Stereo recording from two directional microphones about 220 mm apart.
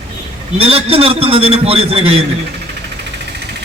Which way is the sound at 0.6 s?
25° right (ahead or behind).